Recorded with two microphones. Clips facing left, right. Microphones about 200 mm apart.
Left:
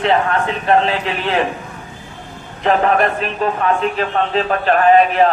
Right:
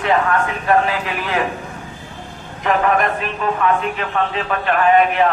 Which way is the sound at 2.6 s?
35° left (ahead or behind).